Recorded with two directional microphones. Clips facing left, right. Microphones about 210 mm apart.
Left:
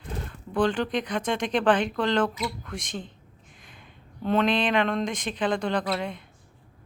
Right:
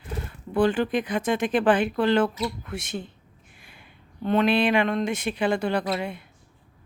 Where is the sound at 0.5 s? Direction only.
10° right (ahead or behind).